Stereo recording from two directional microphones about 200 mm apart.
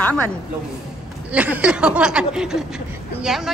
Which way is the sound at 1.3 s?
5° right (ahead or behind).